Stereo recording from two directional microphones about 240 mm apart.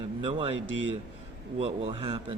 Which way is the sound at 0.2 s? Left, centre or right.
Right.